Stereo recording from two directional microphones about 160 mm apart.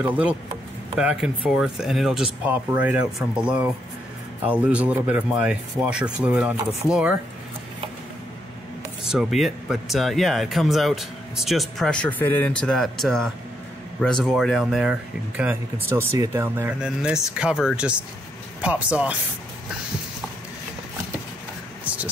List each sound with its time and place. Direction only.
0.0 s speech: 10° right (ahead or behind)
9.0 s speech: 5° right (ahead or behind)
16.8 s speech: 5° right (ahead or behind)
21.8 s vehicle: 10° right (ahead or behind)